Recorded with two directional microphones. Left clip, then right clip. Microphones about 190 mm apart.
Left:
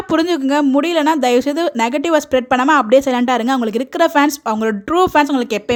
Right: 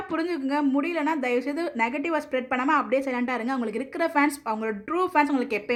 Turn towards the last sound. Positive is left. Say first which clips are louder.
# left 10 dB
turn(degrees=55)  # may be behind; listen again after turning